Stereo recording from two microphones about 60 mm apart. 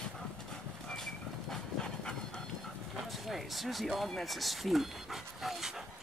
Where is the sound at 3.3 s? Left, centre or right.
Centre.